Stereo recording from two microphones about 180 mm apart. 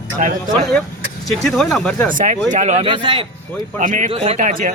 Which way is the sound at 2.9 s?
30° right (ahead or behind).